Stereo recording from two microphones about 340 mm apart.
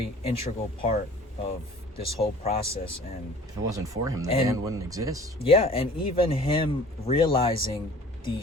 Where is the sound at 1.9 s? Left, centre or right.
Centre.